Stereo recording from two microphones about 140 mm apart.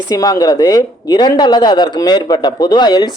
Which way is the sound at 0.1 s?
25° left (ahead or behind).